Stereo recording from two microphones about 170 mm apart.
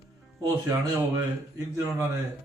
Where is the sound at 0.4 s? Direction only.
20° right (ahead or behind).